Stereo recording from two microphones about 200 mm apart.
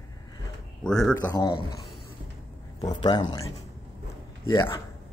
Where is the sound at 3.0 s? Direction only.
20° left (ahead or behind).